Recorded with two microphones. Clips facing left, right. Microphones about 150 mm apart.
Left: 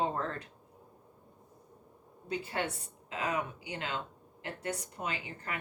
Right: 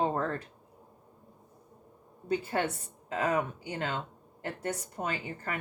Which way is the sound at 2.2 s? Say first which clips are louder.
Right 5 dB; 45° right (ahead or behind).